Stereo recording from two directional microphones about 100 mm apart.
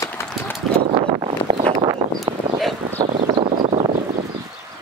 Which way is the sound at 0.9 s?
70° right (ahead or behind).